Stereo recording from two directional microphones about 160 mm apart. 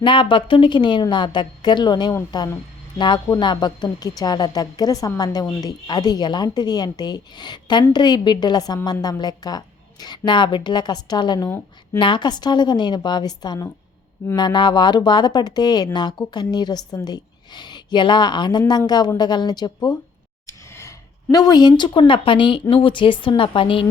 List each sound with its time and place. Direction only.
0.0 s a woman's voice: 30° left (ahead or behind)